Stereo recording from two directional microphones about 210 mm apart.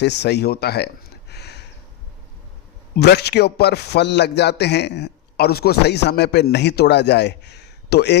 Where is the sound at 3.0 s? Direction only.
50° left (ahead or behind).